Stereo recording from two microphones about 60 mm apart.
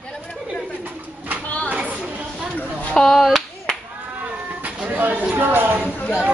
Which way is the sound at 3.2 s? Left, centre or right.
Centre.